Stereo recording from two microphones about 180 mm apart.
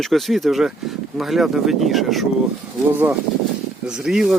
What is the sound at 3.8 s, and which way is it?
Speech, 5° right (ahead or behind).